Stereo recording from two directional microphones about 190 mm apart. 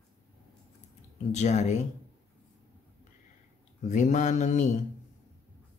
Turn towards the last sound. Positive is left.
turn(degrees=40)  # may be behind; listen again after turning